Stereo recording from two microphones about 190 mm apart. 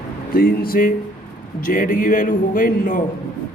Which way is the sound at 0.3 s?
50° left (ahead or behind).